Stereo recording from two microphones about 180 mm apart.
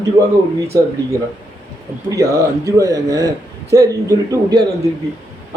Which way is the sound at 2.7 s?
20° right (ahead or behind).